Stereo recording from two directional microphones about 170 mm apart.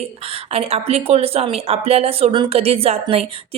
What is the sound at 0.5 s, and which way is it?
A woman's voice, 35° right (ahead or behind).